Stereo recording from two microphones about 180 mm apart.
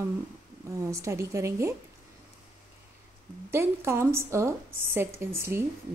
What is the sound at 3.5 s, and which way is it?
A woman's voice, 15° right (ahead or behind).